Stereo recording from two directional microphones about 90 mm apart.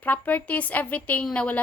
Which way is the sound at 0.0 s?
20° left (ahead or behind).